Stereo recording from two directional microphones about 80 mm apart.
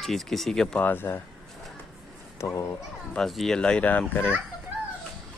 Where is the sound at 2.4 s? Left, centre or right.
Left.